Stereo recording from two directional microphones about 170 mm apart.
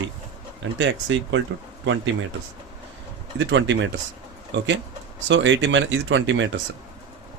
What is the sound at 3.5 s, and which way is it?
Speech, 90° right.